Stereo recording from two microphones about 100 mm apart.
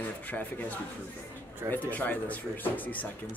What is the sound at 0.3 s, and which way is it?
Speech, 15° left (ahead or behind).